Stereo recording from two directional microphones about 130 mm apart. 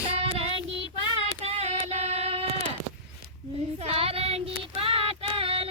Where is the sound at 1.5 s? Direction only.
55° right (ahead or behind).